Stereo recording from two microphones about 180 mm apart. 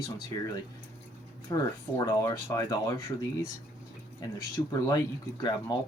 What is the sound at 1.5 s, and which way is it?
Speech, 20° left (ahead or behind).